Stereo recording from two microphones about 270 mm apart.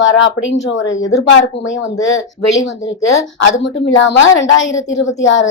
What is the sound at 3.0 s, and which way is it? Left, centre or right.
A woman's voice, left.